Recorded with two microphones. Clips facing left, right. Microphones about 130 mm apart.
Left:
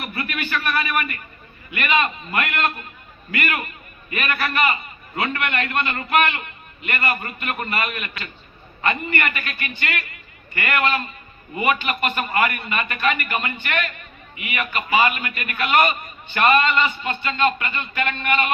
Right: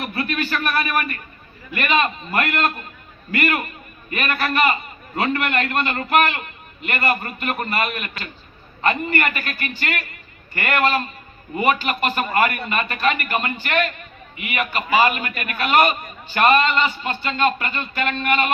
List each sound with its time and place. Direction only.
0.1 s a man's voice: 30° right (ahead or behind)